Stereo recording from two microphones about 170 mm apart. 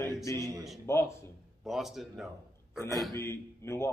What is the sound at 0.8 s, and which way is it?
Speech, 15° left (ahead or behind).